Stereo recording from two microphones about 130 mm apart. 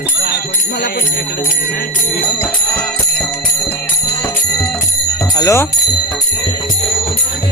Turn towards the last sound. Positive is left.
turn(degrees=25)  # may be behind; listen again after turning